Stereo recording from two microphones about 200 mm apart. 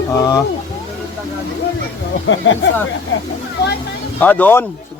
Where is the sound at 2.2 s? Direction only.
70° left (ahead or behind).